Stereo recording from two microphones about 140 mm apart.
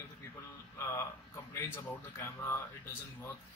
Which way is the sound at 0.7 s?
20° left (ahead or behind).